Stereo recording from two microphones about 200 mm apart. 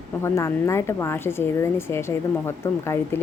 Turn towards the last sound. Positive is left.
turn(degrees=10)  # may be behind; listen again after turning